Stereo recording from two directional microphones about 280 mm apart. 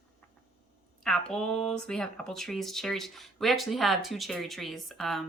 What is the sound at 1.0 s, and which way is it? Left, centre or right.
Speech, centre.